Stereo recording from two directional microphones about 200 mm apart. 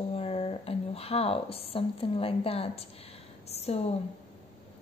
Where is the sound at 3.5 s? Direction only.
30° left (ahead or behind).